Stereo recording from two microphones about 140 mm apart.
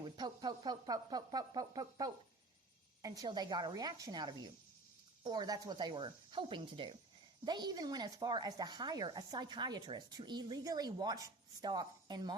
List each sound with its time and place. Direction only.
0.0 s speech: 30° right (ahead or behind)